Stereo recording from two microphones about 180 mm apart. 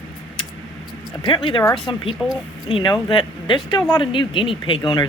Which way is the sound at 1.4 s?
25° left (ahead or behind).